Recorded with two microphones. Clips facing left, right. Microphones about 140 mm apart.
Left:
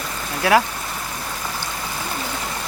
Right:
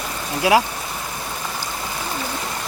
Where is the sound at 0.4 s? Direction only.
15° right (ahead or behind).